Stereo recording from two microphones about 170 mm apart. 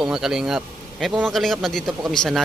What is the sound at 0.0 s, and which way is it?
Speech, 5° right (ahead or behind).